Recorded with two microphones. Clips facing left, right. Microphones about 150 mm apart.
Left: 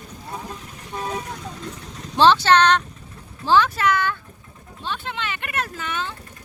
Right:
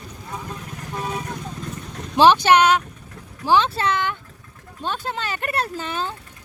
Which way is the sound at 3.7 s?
30° right (ahead or behind).